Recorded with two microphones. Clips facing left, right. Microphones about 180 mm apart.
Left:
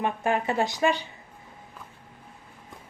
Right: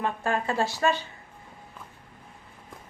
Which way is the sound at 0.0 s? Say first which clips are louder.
Left 2 dB; 20° left (ahead or behind).